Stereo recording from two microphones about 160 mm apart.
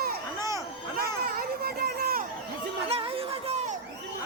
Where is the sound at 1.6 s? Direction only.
75° right (ahead or behind).